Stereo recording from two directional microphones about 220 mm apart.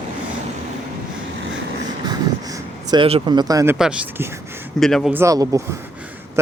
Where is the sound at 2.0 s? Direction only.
15° right (ahead or behind).